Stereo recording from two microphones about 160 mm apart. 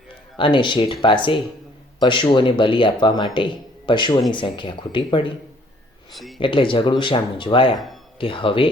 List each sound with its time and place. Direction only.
0.3 s speech: 30° left (ahead or behind)
6.1 s speech: centre (ahead or behind)
6.4 s speech: 35° left (ahead or behind)
7.7 s speech: centre (ahead or behind)
8.2 s speech: 35° left (ahead or behind)